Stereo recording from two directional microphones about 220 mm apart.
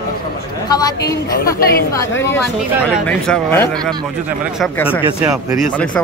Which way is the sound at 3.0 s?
5° left (ahead or behind).